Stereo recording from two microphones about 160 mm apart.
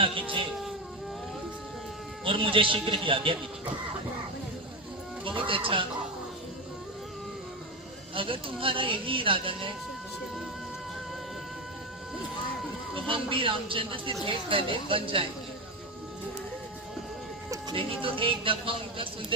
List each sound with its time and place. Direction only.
0.0 s speech: 35° right (ahead or behind)
2.2 s speech: 35° right (ahead or behind)
5.2 s speech: 35° right (ahead or behind)
8.1 s speech: 35° right (ahead or behind)
12.9 s speech: 35° right (ahead or behind)
17.5 s speech: 30° right (ahead or behind)